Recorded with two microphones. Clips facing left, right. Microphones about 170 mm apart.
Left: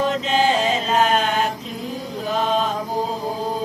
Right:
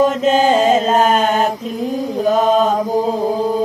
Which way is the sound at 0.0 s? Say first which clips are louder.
Right 6 dB; 45° right (ahead or behind).